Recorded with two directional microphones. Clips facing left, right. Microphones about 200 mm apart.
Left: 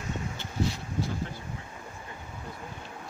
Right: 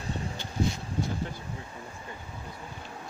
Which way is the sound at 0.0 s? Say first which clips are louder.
Even; 35° right (ahead or behind).